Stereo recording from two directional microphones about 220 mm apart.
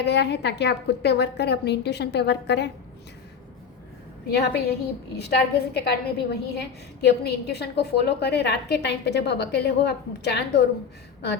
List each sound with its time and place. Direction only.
0.0 s a woman's voice: 50° left (ahead or behind)
4.3 s a woman's voice: 45° left (ahead or behind)